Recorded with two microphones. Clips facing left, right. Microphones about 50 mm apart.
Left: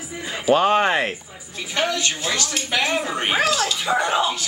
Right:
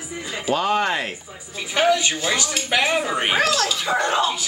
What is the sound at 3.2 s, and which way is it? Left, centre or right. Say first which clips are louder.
Speech: left 1 dB; centre.